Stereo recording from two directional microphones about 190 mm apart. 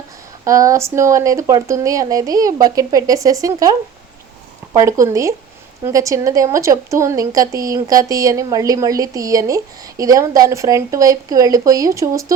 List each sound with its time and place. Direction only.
0.4 s a woman's voice: 15° right (ahead or behind)